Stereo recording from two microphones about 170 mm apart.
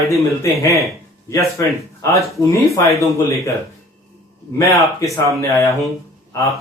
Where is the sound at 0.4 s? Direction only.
20° left (ahead or behind).